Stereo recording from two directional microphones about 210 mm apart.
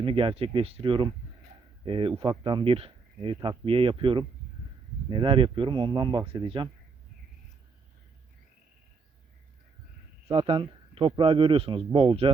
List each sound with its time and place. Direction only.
0.0 s speech: 25° right (ahead or behind)
10.2 s speech: 25° right (ahead or behind)